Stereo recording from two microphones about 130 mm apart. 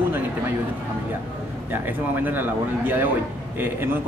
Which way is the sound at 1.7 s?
15° right (ahead or behind).